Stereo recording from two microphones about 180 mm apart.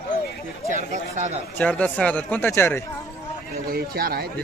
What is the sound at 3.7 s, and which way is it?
Speech, 55° right (ahead or behind).